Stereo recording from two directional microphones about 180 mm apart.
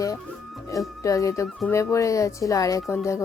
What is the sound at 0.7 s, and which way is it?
Speech, 20° left (ahead or behind).